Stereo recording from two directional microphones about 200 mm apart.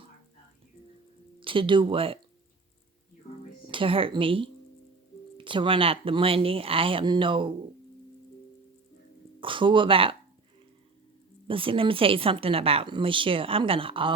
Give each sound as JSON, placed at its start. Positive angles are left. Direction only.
{"t": 1.4, "sound": "speech", "side_deg": -25}
{"t": 3.7, "sound": "a woman's voice", "side_deg": -25}
{"t": 9.4, "sound": "speech", "side_deg": -25}
{"t": 11.4, "sound": "a woman's voice", "side_deg": -25}